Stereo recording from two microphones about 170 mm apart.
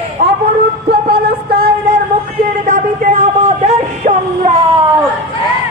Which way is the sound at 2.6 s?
45° right (ahead or behind).